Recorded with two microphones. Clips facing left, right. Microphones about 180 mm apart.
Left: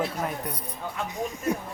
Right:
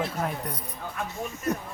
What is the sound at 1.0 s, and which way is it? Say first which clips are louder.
Speech: left 2 dB; 15° left (ahead or behind).